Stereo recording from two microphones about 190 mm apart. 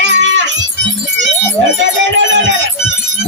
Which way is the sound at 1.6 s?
70° right (ahead or behind).